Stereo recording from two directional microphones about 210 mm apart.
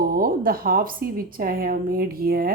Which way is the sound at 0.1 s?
45° right (ahead or behind).